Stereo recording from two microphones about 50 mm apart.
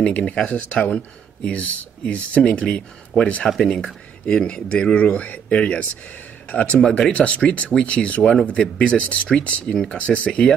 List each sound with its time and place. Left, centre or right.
0.3 s speech: left
3.4 s speech: centre
3.7 s speech: centre
6.8 s speech: centre